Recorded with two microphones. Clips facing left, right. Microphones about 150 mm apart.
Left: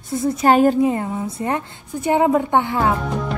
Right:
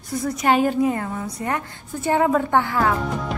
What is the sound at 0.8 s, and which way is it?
A woman's voice, 25° left (ahead or behind).